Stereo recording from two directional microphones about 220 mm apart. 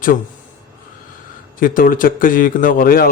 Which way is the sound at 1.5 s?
40° left (ahead or behind).